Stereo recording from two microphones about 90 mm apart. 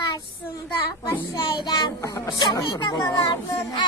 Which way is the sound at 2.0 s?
40° left (ahead or behind).